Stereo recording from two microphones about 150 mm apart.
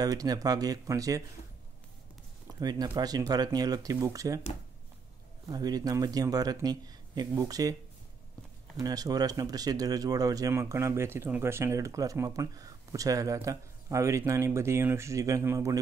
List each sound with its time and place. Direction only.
0.0 s speech: 25° right (ahead or behind)
2.6 s speech: 25° right (ahead or behind)
5.5 s speech: 25° right (ahead or behind)
8.7 s speech: 25° right (ahead or behind)